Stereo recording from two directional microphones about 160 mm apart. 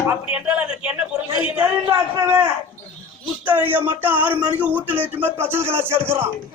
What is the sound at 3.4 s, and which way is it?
Speech, 10° right (ahead or behind).